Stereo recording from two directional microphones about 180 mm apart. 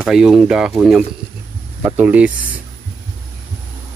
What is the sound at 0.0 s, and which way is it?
Speech, 5° right (ahead or behind).